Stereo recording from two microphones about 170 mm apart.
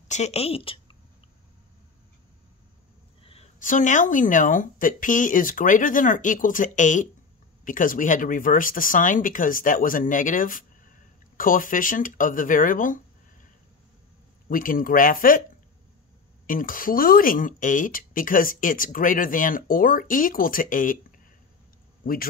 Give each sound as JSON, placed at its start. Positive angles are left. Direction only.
{"t": 0.1, "sound": "speech", "side_deg": 40}
{"t": 3.6, "sound": "a woman's voice", "side_deg": 50}
{"t": 14.5, "sound": "speech", "side_deg": 55}
{"t": 16.4, "sound": "a woman's voice", "side_deg": 55}
{"t": 22.0, "sound": "speech", "side_deg": 60}